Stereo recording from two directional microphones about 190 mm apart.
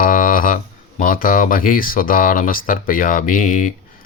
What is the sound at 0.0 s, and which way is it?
Speech, 45° left (ahead or behind).